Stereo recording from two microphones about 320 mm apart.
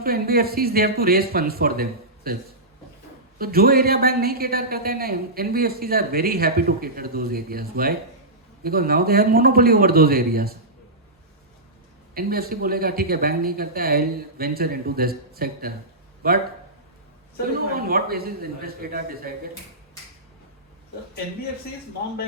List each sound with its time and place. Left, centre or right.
0.0 s a man's voice: right
12.1 s a man's voice: right
17.7 s a man's voice: right